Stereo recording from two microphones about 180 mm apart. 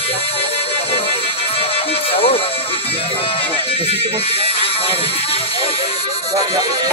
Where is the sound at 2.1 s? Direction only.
30° left (ahead or behind).